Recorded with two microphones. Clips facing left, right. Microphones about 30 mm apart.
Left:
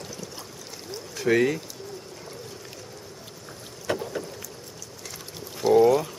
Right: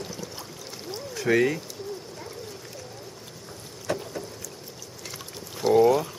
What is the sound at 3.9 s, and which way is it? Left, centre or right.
Rowboat, left.